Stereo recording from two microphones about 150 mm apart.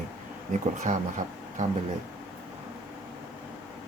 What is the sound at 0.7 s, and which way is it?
Speech, 55° right (ahead or behind).